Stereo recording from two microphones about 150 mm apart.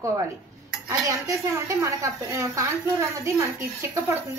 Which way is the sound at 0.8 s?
20° right (ahead or behind).